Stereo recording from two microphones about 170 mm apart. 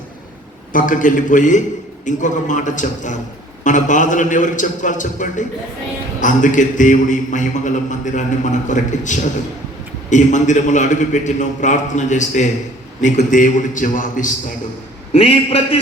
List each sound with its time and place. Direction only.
0.7 s a man's voice: 50° left (ahead or behind)
15.1 s a man's voice: 35° left (ahead or behind)